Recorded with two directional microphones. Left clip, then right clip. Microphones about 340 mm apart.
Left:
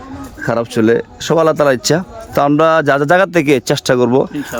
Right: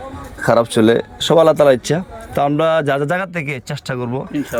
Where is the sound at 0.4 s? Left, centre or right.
Centre.